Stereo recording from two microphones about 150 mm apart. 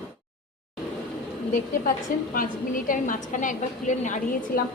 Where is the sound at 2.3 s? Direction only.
65° left (ahead or behind).